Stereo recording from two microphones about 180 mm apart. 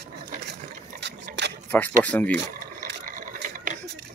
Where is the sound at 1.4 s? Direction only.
80° right.